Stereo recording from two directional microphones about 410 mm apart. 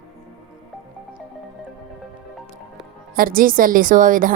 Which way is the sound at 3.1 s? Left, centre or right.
Right.